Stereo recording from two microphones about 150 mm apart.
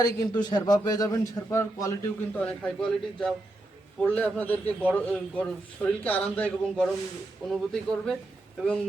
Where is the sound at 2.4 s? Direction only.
5° left (ahead or behind).